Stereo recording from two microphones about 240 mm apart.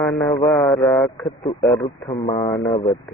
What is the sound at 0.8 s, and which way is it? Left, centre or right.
Speech, centre.